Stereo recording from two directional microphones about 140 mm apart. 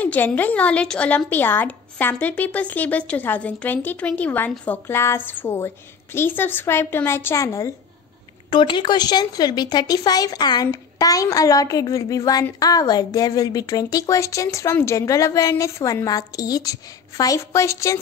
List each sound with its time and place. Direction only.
0.0 s a woman's voice: 10° left (ahead or behind)
8.5 s a woman's voice: 35° left (ahead or behind)